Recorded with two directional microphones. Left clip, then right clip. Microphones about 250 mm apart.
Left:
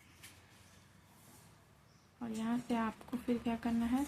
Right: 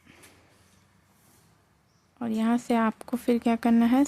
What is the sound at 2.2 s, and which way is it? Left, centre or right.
Speech, right.